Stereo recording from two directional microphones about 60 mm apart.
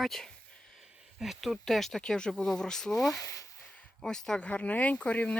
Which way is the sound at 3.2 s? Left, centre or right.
Left.